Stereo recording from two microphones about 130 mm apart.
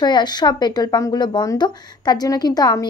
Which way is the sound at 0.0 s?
35° left (ahead or behind).